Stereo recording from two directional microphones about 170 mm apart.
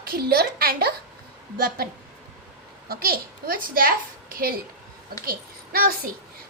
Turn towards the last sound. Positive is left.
turn(degrees=-60)  # may be behind; listen again after turning